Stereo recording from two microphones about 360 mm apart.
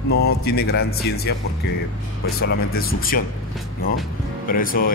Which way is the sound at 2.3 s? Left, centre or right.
Left.